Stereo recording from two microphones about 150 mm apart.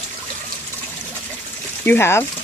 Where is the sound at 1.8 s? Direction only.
15° left (ahead or behind).